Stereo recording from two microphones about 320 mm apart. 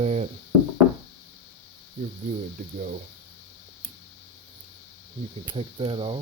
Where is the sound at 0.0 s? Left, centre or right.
Right.